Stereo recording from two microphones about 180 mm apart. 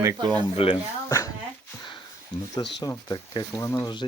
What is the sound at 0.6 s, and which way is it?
Speech, 30° left (ahead or behind).